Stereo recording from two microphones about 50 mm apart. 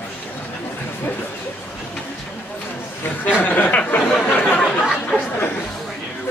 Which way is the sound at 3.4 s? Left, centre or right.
Left.